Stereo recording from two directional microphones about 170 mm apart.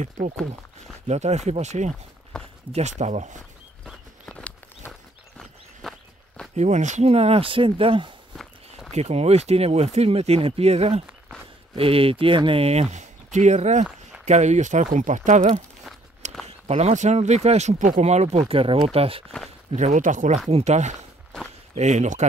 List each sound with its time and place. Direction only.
0.0 s speech: 45° right (ahead or behind)
2.3 s speech: 5° left (ahead or behind)
2.7 s speech: 40° right (ahead or behind)
3.8 s walk: 5° left (ahead or behind)
6.5 s speech: 45° right (ahead or behind)
8.4 s walk: centre (ahead or behind)
8.9 s speech: 40° right (ahead or behind)